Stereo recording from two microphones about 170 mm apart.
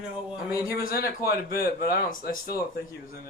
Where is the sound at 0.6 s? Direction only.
65° left (ahead or behind).